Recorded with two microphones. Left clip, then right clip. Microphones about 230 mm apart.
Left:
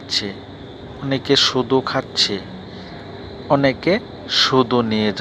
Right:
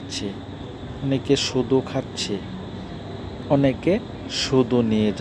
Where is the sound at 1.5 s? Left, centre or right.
Left.